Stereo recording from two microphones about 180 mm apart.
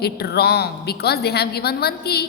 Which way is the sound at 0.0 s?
65° left (ahead or behind).